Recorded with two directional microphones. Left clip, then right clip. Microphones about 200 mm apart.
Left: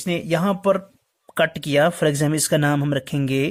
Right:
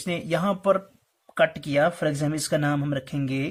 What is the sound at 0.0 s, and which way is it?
Speech, 45° left (ahead or behind).